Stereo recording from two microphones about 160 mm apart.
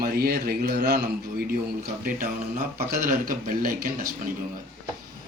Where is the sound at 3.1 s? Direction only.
60° right (ahead or behind).